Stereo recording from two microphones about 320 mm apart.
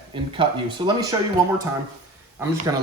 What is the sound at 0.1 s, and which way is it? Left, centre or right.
Speech, centre.